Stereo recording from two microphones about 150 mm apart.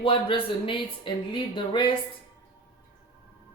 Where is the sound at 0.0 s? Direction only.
35° left (ahead or behind).